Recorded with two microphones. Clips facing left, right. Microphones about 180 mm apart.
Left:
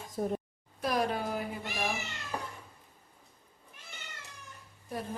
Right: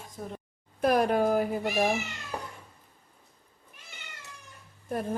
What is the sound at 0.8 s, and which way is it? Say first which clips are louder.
Speech: right 7 dB; 55° right (ahead or behind).